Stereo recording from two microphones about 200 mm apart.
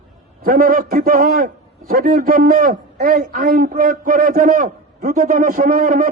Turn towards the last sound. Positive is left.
turn(degrees=-40)  # may be behind; listen again after turning